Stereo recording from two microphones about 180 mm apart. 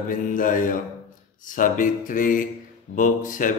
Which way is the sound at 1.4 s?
45° left (ahead or behind).